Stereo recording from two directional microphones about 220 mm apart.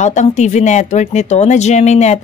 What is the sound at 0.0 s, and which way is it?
Speech, 30° left (ahead or behind).